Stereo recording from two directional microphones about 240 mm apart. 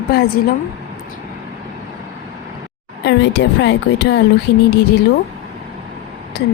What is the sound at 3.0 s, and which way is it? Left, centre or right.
Speech, left.